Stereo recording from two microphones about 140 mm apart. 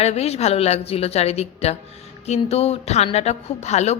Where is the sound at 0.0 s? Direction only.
50° left (ahead or behind).